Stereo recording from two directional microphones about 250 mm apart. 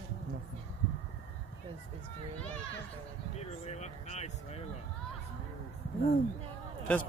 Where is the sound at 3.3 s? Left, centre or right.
Left.